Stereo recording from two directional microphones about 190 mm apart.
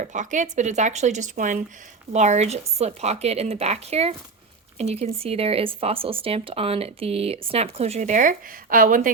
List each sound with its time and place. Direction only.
0.0 s speech: 40° right (ahead or behind)